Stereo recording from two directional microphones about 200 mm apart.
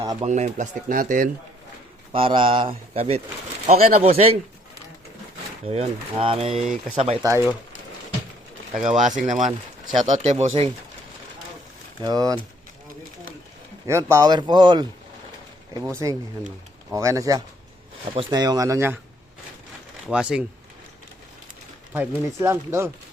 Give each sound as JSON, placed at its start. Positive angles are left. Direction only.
{"t": 0.0, "sound": "speech", "side_deg": -20}
{"t": 0.3, "sound": "speech", "side_deg": -35}
{"t": 2.1, "sound": "speech", "side_deg": -25}
{"t": 5.6, "sound": "speech", "side_deg": -30}
{"t": 6.7, "sound": "speech", "side_deg": -35}
{"t": 7.2, "sound": "speech", "side_deg": -15}
{"t": 8.8, "sound": "speech", "side_deg": -40}
{"t": 12.0, "sound": "speech", "side_deg": -20}
{"t": 13.8, "sound": "speech", "side_deg": -15}
{"t": 20.1, "sound": "speech", "side_deg": -5}
{"t": 21.9, "sound": "speech", "side_deg": -15}